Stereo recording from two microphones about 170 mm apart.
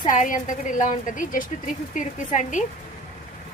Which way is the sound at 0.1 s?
50° left (ahead or behind).